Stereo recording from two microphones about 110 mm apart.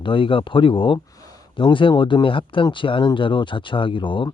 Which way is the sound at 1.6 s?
50° left (ahead or behind).